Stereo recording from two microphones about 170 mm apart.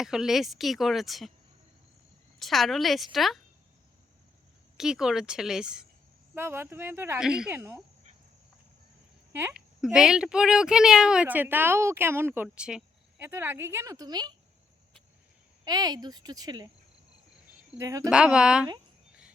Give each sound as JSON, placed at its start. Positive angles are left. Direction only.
{"t": 0.0, "sound": "speech", "side_deg": -5}
{"t": 2.4, "sound": "speech", "side_deg": 0}
{"t": 4.8, "sound": "speech", "side_deg": -5}
{"t": 9.3, "sound": "speech", "side_deg": -10}
{"t": 15.6, "sound": "speech", "side_deg": -25}
{"t": 17.7, "sound": "speech", "side_deg": -20}
{"t": 18.1, "sound": "speech", "side_deg": -5}